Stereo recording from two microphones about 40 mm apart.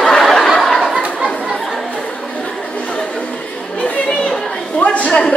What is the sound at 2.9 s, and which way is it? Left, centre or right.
Chatter, centre.